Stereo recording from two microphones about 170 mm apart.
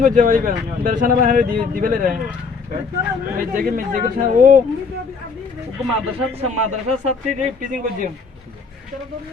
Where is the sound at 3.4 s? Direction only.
55° right (ahead or behind).